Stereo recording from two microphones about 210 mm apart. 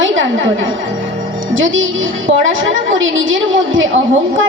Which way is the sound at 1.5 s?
65° right (ahead or behind).